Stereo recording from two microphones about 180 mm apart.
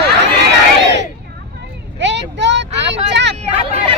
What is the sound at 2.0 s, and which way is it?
Vehicle, 75° right (ahead or behind).